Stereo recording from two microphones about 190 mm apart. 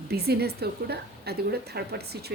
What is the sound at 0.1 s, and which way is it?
A woman's voice, 55° right (ahead or behind).